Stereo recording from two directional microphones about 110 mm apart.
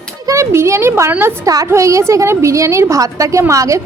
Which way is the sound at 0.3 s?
25° right (ahead or behind).